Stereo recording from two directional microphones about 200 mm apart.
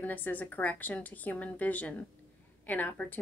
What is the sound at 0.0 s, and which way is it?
Speech, 10° left (ahead or behind).